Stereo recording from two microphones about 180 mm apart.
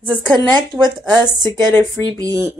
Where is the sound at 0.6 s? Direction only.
25° right (ahead or behind).